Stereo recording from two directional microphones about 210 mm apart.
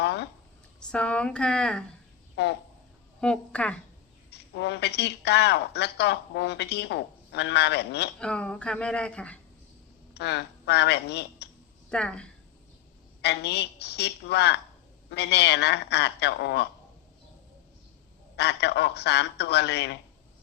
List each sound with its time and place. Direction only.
0.0 s a sound: 55° left (ahead or behind)
0.8 s speech: 5° left (ahead or behind)
2.3 s a sound: 55° left (ahead or behind)
3.2 s speech: 5° left (ahead or behind)
4.3 s speech: 55° left (ahead or behind)
8.2 s speech: 5° left (ahead or behind)
10.2 s speech: 55° left (ahead or behind)
11.9 s a woman's voice: 5° left (ahead or behind)
13.2 s speech: 55° left (ahead or behind)
18.3 s speech: 55° left (ahead or behind)